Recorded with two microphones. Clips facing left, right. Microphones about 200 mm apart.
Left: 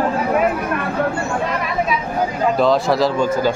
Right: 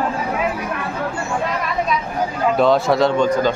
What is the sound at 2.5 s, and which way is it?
Speech, centre (ahead or behind).